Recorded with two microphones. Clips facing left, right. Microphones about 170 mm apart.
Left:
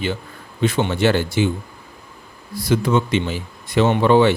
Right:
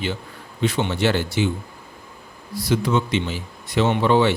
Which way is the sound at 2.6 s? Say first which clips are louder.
Left 3 dB; 50° left (ahead or behind).